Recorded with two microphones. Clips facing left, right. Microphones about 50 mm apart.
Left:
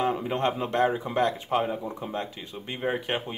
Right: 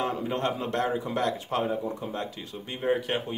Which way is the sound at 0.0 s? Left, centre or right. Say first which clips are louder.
Left 2 dB; centre.